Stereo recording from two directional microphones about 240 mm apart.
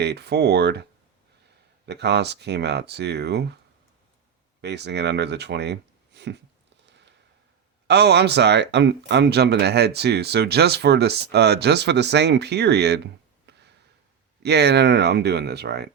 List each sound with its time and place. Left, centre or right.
0.0 s speech: right
1.9 s speech: right
4.6 s speech: right
7.9 s speech: right
13.5 s a sound: right
14.4 s speech: right